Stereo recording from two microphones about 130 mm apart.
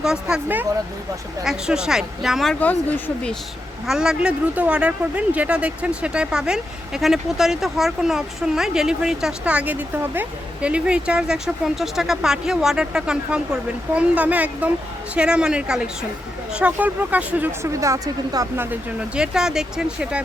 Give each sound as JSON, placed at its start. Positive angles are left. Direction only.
{"t": 0.0, "sound": "speech", "side_deg": -5}
{"t": 2.6, "sound": "speech", "side_deg": 10}
{"t": 3.8, "sound": "speech", "side_deg": -5}
{"t": 18.6, "sound": "speech", "side_deg": -10}